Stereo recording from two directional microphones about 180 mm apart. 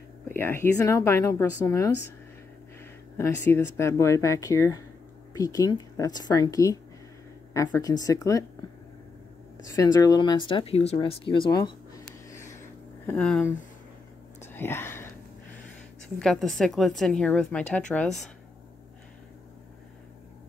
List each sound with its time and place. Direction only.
0.3 s speech: 10° left (ahead or behind)
3.2 s speech: 15° left (ahead or behind)
9.7 s speech: 20° left (ahead or behind)
13.0 s speech: 10° left (ahead or behind)
14.5 s whispering: 15° left (ahead or behind)
16.2 s speech: 5° left (ahead or behind)